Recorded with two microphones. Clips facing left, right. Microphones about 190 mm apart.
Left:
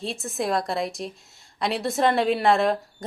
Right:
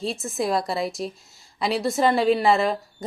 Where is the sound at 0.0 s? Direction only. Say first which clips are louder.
Right 2 dB; centre (ahead or behind).